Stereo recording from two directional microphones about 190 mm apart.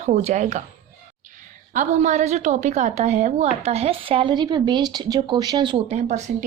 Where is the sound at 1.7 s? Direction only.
40° right (ahead or behind).